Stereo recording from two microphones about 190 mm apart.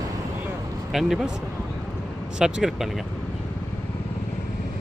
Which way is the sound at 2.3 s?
5° right (ahead or behind).